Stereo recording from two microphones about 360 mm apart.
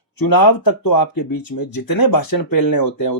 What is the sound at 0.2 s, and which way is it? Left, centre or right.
Speech, left.